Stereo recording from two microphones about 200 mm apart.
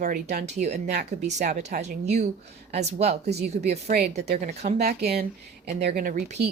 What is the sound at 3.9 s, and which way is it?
Speech, 40° right (ahead or behind).